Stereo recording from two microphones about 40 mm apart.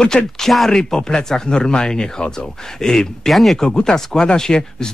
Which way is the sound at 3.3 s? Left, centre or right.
Centre.